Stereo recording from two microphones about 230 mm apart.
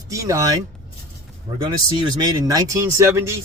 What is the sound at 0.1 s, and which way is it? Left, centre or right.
Speech, centre.